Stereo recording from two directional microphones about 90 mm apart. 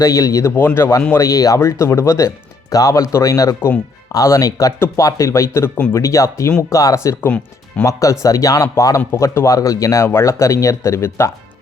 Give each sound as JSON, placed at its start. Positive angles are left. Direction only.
{"t": 0.0, "sound": "speech", "side_deg": 35}
{"t": 7.2, "sound": "speech", "side_deg": 15}
{"t": 7.9, "sound": "speech", "side_deg": 35}